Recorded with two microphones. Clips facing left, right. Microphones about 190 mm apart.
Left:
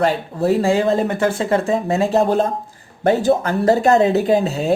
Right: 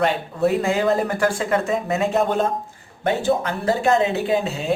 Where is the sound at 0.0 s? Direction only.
35° left (ahead or behind).